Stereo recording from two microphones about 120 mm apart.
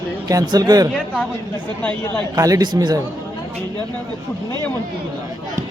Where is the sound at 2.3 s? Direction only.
30° right (ahead or behind).